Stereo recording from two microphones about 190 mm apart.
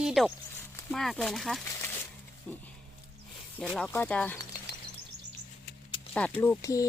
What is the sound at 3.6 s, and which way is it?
Speech, 5° left (ahead or behind).